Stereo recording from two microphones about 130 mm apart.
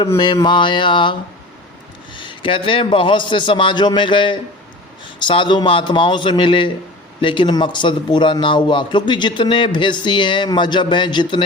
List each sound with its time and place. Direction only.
0.2 s a man's voice: 35° left (ahead or behind)
2.1 s a man's voice: 40° left (ahead or behind)